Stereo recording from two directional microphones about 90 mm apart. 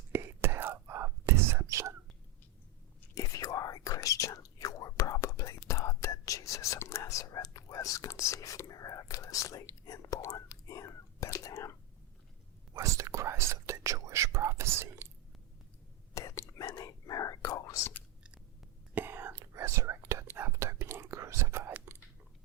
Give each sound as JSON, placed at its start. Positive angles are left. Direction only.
{"t": 0.1, "sound": "whispering", "side_deg": -25}
{"t": 3.2, "sound": "whispering", "side_deg": 40}
{"t": 12.7, "sound": "whispering", "side_deg": -35}
{"t": 16.1, "sound": "whispering", "side_deg": 30}
{"t": 18.2, "sound": "chewing", "side_deg": -10}
{"t": 18.9, "sound": "whispering", "side_deg": -25}